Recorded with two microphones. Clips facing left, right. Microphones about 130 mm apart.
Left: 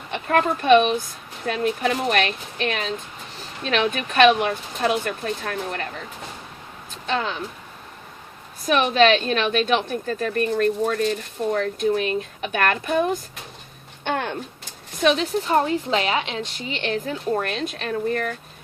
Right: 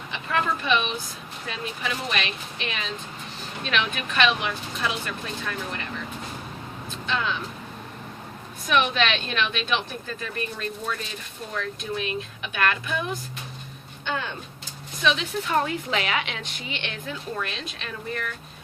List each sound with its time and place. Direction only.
0.1 s speech: 50° left (ahead or behind)
7.1 s speech: 45° left (ahead or behind)
8.6 s speech: 40° left (ahead or behind)
14.0 s a sound: 60° left (ahead or behind)
15.0 s a woman's voice: 40° left (ahead or behind)